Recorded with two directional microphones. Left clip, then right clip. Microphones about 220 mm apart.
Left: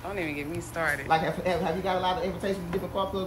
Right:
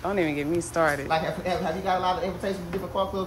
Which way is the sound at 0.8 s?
20° right (ahead or behind).